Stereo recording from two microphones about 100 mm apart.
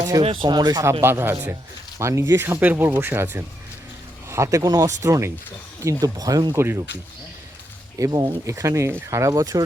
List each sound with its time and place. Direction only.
0.4 s speech: 45° right (ahead or behind)
1.0 s speech: 25° right (ahead or behind)
4.3 s speech: 30° right (ahead or behind)
6.6 s speech: 25° right (ahead or behind)
7.9 s speech: 35° right (ahead or behind)